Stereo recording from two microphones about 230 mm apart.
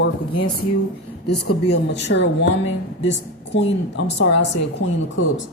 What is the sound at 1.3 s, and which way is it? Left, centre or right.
A woman's voice, left.